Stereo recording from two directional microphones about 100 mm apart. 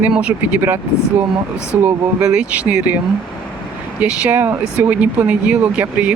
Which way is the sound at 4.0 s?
15° right (ahead or behind).